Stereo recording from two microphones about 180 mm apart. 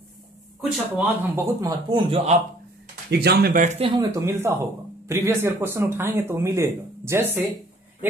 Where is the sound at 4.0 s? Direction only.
20° right (ahead or behind).